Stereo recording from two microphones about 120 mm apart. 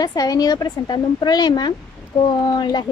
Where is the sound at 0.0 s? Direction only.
30° left (ahead or behind).